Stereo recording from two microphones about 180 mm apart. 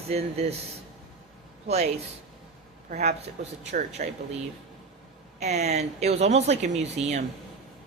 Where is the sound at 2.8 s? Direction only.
40° right (ahead or behind).